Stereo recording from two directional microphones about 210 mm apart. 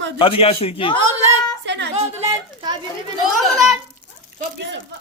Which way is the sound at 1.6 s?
55° right (ahead or behind).